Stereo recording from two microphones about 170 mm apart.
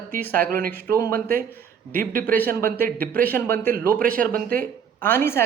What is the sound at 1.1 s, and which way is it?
Speech, 55° right (ahead or behind).